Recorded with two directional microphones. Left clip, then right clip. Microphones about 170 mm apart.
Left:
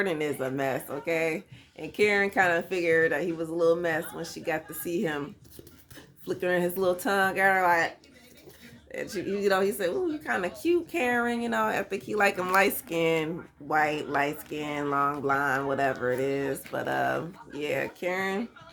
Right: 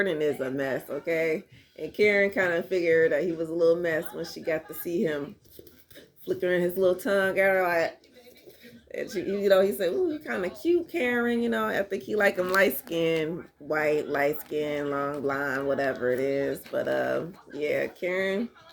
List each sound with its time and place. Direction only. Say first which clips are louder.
0.0 s speech: right 2 dB; 20° left (ahead or behind)
6.2 s speech: right 1 dB; 20° left (ahead or behind)
8.9 s speech: right 1 dB; 15° left (ahead or behind)